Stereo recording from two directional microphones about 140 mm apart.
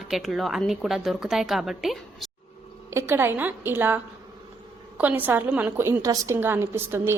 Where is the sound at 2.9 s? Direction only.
15° right (ahead or behind).